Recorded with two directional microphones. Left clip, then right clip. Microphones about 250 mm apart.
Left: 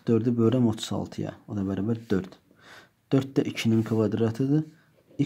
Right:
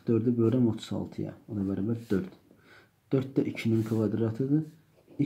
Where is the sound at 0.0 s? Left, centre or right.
Left.